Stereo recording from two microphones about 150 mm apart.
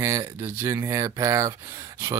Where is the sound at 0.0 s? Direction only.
20° right (ahead or behind).